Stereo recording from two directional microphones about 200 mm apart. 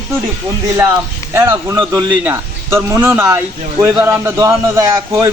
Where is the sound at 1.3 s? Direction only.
10° right (ahead or behind).